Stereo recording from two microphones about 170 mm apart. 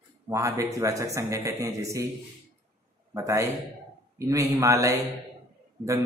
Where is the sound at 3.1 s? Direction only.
20° right (ahead or behind).